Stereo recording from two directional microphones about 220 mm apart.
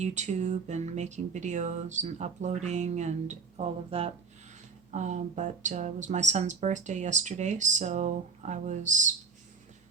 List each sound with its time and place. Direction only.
0.0 s speech: 30° right (ahead or behind)